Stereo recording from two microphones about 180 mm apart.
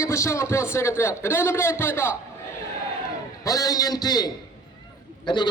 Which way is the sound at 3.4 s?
20° left (ahead or behind).